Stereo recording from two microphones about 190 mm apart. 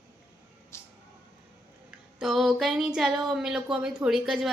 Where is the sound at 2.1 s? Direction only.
Centre (ahead or behind).